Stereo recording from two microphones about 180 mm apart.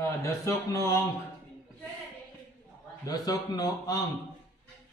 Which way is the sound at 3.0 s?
20° left (ahead or behind).